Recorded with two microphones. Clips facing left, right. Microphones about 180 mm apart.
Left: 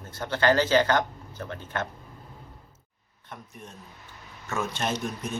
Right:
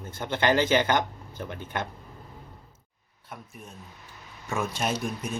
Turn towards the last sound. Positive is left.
turn(degrees=-10)  # may be behind; listen again after turning